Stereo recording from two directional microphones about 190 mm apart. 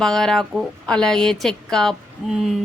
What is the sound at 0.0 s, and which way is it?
A woman's voice, centre (ahead or behind).